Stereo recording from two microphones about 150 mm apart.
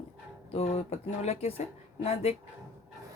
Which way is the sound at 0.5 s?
45° left (ahead or behind).